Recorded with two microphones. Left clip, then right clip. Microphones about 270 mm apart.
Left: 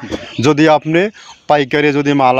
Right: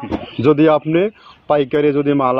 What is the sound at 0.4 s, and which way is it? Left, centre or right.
A man's voice, left.